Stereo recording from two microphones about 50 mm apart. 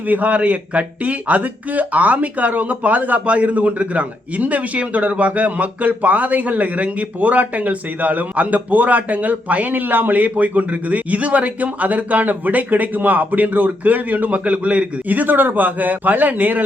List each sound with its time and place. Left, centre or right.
0.1 s speech: right